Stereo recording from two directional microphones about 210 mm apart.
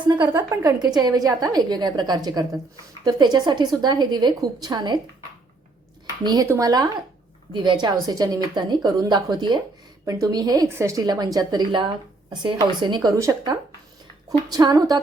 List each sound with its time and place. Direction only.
0.0 s a woman's voice: 20° right (ahead or behind)
6.2 s a woman's voice: 15° right (ahead or behind)